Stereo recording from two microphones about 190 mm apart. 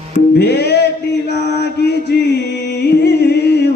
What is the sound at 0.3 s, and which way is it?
Music, 60° left (ahead or behind).